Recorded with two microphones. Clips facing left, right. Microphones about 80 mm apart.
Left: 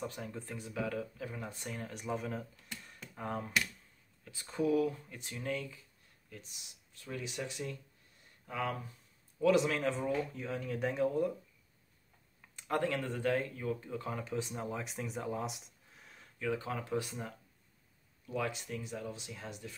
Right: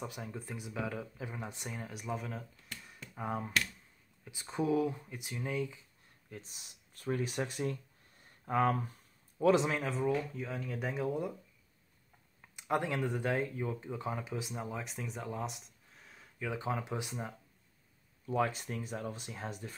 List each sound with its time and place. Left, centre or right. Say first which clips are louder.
0.0 s speech: left 1 dB; centre
1.8 s speech: left 2 dB; centre
6.3 s speech: right 3 dB; right
9.4 s speech: right 1 dB; right
9.8 s speech: right 1 dB; centre
12.4 s speech: right 1 dB; centre
16.3 s speech: even; centre
18.2 s speech: right 4 dB; right